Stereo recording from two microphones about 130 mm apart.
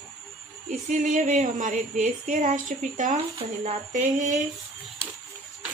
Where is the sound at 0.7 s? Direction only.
70° right (ahead or behind).